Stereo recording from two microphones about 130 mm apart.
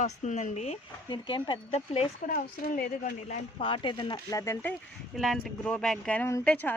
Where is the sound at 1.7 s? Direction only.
55° left (ahead or behind).